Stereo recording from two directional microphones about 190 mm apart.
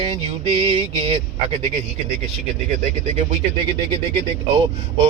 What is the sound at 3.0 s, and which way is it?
Speech, 35° right (ahead or behind).